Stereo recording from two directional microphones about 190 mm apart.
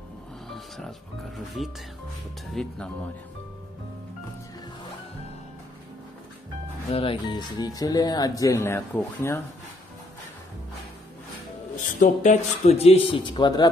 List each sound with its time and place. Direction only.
0.5 s speech: centre (ahead or behind)
6.9 s speech: 30° left (ahead or behind)
11.7 s a man's voice: 40° left (ahead or behind); by 13.7 s 20° left (ahead or behind)